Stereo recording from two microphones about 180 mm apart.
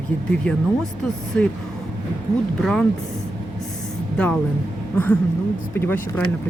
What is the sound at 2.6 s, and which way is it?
Speech, centre (ahead or behind).